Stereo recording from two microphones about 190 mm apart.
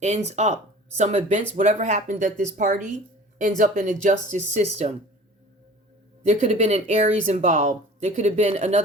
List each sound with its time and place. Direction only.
0.0 s speech: 35° right (ahead or behind)
6.2 s speech: 35° right (ahead or behind)